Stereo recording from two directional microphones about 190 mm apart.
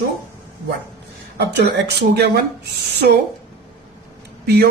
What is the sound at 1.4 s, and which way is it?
A man's voice, 60° right (ahead or behind).